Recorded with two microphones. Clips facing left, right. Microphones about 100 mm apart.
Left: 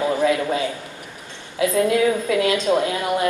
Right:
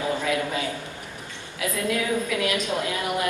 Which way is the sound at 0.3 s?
25° left (ahead or behind).